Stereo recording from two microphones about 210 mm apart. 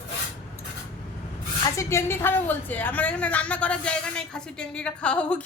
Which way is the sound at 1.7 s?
10° left (ahead or behind).